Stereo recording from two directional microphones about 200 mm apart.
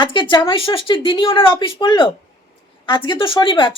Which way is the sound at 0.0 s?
25° left (ahead or behind).